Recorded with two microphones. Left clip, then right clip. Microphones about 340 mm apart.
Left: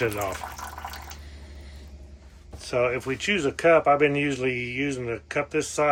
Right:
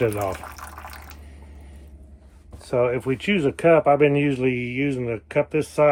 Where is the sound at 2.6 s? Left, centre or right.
Centre.